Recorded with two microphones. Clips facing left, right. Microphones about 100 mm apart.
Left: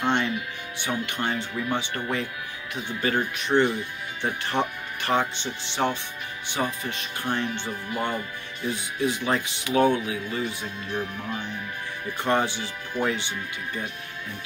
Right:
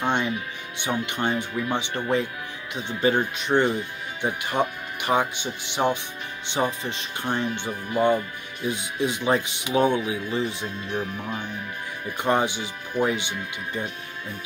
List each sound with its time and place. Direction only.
0.0 s music: 15° right (ahead or behind)
0.7 s speech: 20° right (ahead or behind)
12.2 s speech: 15° right (ahead or behind)